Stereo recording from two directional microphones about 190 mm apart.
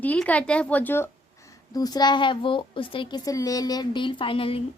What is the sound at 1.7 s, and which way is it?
A woman's voice, 20° left (ahead or behind).